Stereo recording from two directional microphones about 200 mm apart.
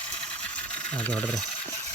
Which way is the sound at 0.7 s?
5° left (ahead or behind).